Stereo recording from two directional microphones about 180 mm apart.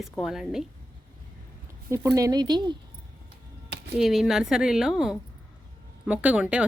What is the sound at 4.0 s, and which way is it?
A woman's voice, centre (ahead or behind).